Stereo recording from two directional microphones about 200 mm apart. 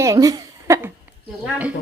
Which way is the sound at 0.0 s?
15° right (ahead or behind).